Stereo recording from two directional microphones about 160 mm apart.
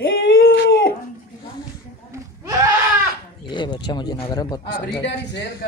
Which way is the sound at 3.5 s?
30° left (ahead or behind).